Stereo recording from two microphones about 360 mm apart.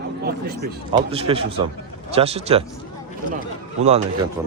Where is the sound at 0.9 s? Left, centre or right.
Centre.